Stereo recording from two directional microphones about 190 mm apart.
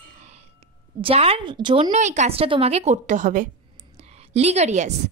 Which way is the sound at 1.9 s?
40° right (ahead or behind).